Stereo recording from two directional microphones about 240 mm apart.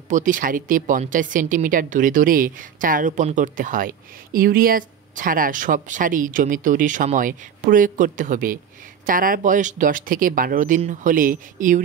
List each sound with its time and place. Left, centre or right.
0.1 s speech: right